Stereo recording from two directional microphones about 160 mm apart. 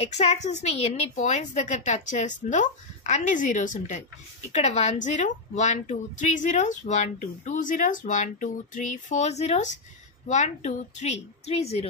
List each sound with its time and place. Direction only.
0.0 s a woman's voice: 40° left (ahead or behind)